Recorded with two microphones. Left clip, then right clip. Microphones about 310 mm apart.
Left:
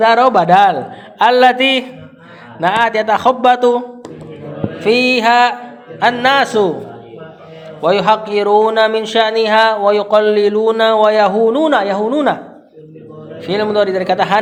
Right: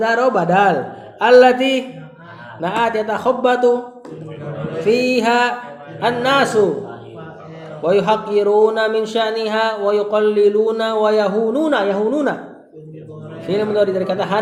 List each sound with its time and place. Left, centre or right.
0.0 s a man's voice: left
4.9 s a man's voice: left
7.8 s a man's voice: left
13.4 s speech: left